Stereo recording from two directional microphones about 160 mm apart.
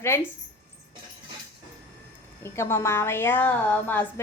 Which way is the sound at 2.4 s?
15° left (ahead or behind).